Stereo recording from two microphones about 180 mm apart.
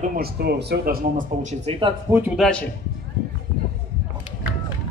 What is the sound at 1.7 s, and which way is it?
Speech, 35° right (ahead or behind).